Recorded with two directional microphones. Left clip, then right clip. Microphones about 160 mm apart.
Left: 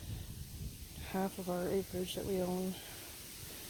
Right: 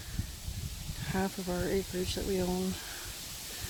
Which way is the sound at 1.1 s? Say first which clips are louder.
Right 3 dB; 15° right (ahead or behind).